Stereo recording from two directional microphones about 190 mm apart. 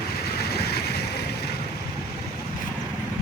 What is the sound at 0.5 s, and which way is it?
Vehicle, 60° left (ahead or behind).